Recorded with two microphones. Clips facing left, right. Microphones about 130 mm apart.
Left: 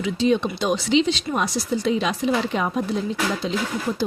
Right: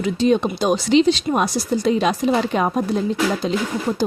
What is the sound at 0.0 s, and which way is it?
Speech, 45° right (ahead or behind).